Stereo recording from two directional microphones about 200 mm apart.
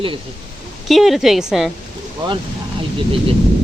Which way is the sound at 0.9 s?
Centre (ahead or behind).